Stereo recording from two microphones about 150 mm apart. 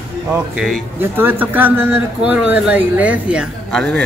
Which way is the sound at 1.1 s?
15° right (ahead or behind).